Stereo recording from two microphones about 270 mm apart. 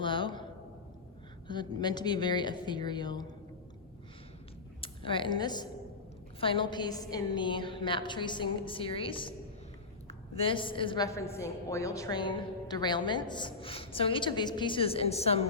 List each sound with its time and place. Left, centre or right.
0.0 s speech: centre
1.5 s a woman's voice: centre
4.8 s a woman's voice: centre